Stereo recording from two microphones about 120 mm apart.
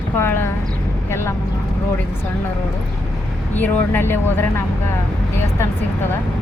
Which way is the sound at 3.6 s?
15° left (ahead or behind).